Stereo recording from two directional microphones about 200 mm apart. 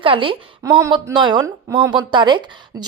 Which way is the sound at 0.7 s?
15° right (ahead or behind).